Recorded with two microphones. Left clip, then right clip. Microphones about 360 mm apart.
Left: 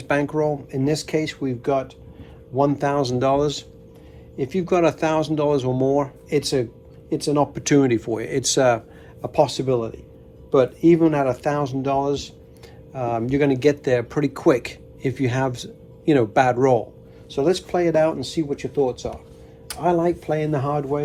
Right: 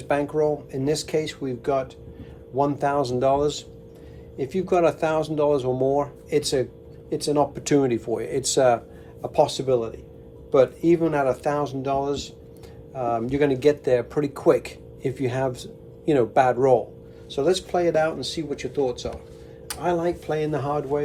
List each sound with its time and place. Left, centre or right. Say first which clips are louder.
0.1 s speech: left 1 dB; left